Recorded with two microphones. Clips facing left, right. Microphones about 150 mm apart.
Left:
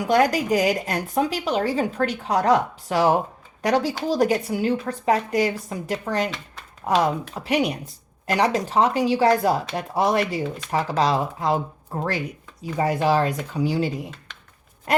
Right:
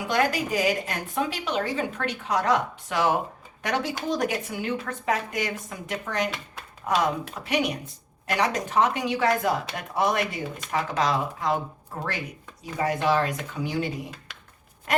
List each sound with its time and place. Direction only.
0.0 s a woman's voice: 40° left (ahead or behind)
12.7 s a woman's voice: 35° left (ahead or behind)